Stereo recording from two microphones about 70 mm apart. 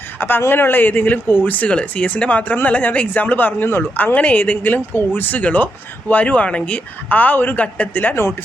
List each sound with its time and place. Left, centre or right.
0.2 s speech: left